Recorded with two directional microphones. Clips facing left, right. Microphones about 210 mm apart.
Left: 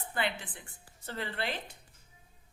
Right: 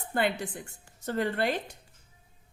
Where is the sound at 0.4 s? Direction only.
45° right (ahead or behind).